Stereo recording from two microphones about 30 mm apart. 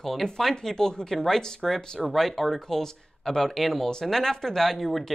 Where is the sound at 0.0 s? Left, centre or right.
Centre.